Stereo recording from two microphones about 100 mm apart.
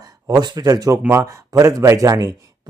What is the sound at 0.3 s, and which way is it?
Speech, 40° right (ahead or behind).